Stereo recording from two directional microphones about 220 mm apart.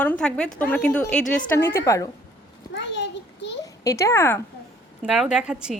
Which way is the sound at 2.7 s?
55° left (ahead or behind).